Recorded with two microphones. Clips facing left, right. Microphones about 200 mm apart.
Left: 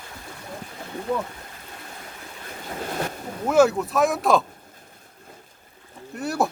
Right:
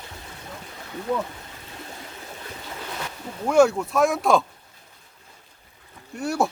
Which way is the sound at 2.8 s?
45° left (ahead or behind).